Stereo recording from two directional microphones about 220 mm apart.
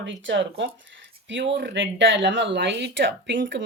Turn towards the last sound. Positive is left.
turn(degrees=-55)  # may be behind; listen again after turning